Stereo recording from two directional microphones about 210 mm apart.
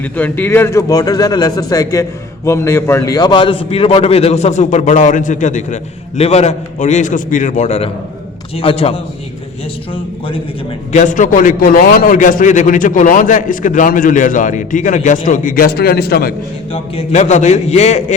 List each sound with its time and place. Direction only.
0.0 s a man's voice: 10° left (ahead or behind); by 10.4 s 25° left (ahead or behind)
10.9 s a man's voice: 35° left (ahead or behind)
16.7 s a man's voice: 25° left (ahead or behind)